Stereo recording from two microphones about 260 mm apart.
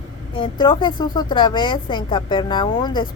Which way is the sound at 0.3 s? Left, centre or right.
Centre.